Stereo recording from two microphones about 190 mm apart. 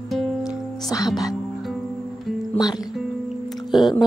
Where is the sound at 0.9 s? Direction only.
20° left (ahead or behind).